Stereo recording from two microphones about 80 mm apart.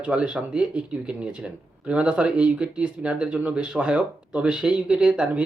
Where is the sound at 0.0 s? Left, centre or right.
Centre.